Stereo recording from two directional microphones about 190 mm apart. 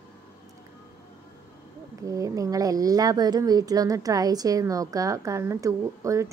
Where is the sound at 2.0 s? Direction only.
15° right (ahead or behind).